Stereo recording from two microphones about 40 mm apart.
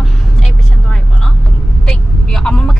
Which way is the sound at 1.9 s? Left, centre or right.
Centre.